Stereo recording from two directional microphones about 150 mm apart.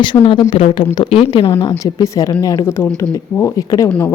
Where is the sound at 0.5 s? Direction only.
35° left (ahead or behind).